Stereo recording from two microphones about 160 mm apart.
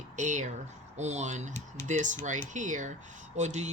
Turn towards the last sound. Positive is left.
turn(degrees=-45)  # may be behind; listen again after turning